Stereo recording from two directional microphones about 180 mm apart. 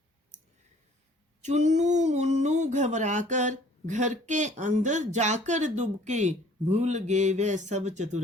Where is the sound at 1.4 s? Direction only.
40° right (ahead or behind).